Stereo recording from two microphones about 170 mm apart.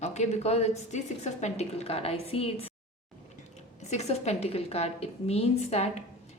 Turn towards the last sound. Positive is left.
turn(degrees=40)  # may be behind; listen again after turning